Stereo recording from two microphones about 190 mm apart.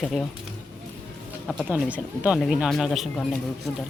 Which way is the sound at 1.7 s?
5° right (ahead or behind).